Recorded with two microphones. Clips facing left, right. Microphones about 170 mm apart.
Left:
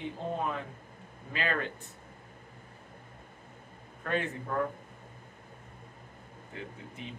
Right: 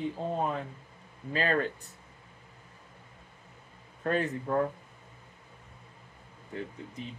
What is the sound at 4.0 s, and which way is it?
Speech, 35° right (ahead or behind).